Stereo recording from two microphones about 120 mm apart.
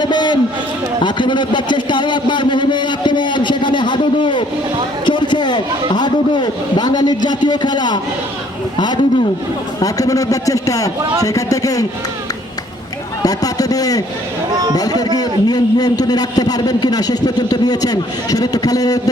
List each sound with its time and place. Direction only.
0.0 s a sound: 40° left (ahead or behind)
1.0 s a man's voice: 40° left (ahead or behind)
13.2 s a man's voice: 30° left (ahead or behind)